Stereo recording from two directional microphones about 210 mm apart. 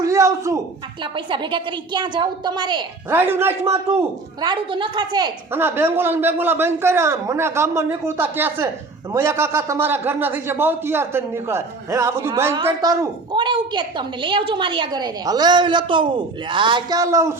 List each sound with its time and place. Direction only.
0.0 s a sound: 15° right (ahead or behind)
1.1 s a woman's voice: 25° right (ahead or behind)
4.4 s a woman's voice: 20° right (ahead or behind)